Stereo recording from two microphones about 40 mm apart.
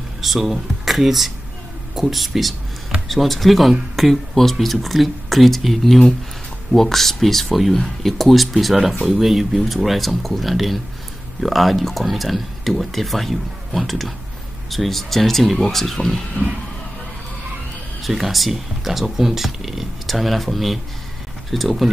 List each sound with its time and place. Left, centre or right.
0.2 s speech: centre
18.0 s speech: centre